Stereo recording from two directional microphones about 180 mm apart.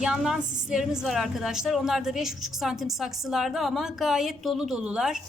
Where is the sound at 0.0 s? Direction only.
5° right (ahead or behind).